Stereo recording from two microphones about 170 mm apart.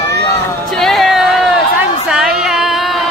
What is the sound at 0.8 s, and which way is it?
Music, centre (ahead or behind).